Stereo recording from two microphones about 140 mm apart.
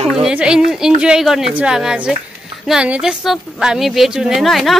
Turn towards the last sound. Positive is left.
turn(degrees=0)  # may be behind; listen again after turning